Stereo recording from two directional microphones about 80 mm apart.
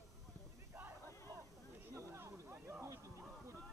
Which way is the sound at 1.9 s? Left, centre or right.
Right.